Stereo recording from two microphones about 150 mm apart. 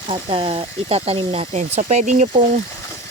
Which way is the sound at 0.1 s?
40° right (ahead or behind).